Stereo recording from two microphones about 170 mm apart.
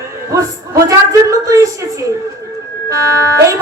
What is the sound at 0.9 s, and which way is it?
Speech, 20° right (ahead or behind).